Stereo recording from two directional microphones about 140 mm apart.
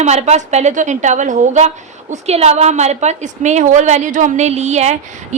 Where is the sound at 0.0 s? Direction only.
55° right (ahead or behind).